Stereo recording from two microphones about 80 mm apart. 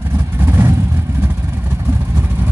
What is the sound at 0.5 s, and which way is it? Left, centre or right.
Vehicle, right.